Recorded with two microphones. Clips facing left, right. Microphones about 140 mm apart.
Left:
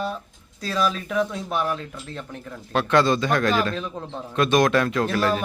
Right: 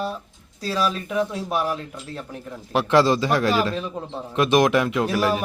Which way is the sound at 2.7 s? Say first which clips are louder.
Right 2 dB; 25° right (ahead or behind).